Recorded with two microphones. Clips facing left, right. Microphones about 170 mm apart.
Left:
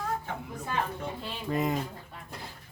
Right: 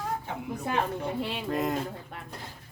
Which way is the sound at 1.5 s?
Centre (ahead or behind).